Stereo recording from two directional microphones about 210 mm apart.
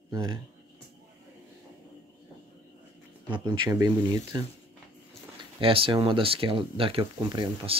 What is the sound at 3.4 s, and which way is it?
Speech, 20° right (ahead or behind).